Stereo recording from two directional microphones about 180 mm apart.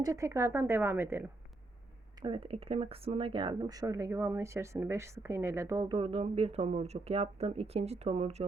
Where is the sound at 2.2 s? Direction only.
30° right (ahead or behind).